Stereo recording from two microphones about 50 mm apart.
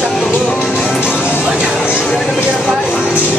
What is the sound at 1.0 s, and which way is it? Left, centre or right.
Music, centre.